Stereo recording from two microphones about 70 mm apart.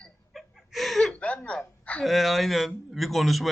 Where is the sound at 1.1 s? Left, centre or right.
Centre.